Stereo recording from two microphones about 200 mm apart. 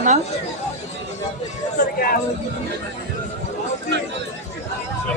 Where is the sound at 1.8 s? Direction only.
45° left (ahead or behind).